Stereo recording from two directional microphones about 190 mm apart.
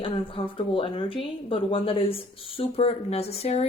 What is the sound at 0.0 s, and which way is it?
Speech, 30° left (ahead or behind).